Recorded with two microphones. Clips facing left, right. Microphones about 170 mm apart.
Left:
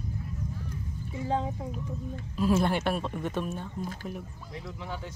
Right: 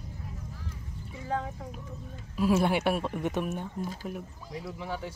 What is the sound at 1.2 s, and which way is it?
Speech, 20° left (ahead or behind).